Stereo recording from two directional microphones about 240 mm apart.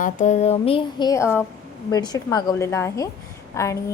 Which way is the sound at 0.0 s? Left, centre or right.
Left.